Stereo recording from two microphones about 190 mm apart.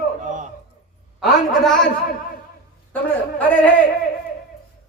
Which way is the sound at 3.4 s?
10° left (ahead or behind).